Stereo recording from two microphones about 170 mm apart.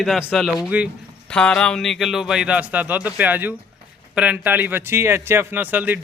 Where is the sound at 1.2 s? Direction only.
5° left (ahead or behind).